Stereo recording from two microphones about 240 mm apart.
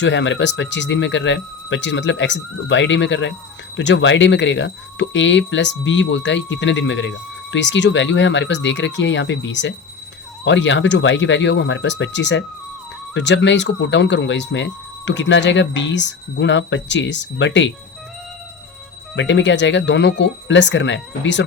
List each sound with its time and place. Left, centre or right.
0.0 s speech: left
19.1 s speech: left